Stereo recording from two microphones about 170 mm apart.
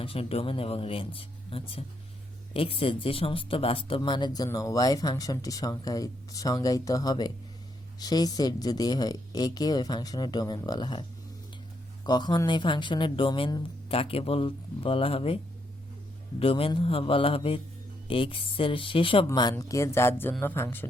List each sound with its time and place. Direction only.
0.0 s speech: 35° left (ahead or behind)
12.0 s speech: 25° left (ahead or behind)
16.4 s speech: 30° left (ahead or behind); by 20.8 s 10° left (ahead or behind)